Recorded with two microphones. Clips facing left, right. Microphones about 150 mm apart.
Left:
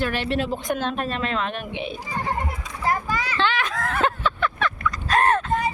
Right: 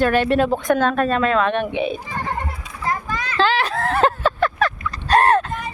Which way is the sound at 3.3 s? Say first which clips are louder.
Right 7 dB; 35° right (ahead or behind).